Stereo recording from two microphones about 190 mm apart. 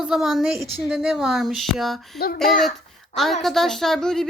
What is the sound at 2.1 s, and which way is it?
Speech, 55° left (ahead or behind).